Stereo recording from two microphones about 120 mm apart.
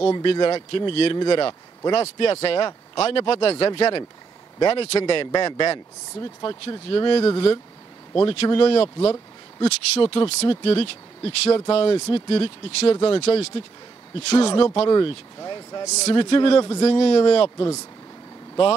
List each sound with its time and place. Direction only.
0.1 s speech: 45° left (ahead or behind)
6.4 s speech: 40° left (ahead or behind)
14.9 s speech: 40° left (ahead or behind)
15.9 s speech: 65° left (ahead or behind)
16.2 s speech: 45° left (ahead or behind)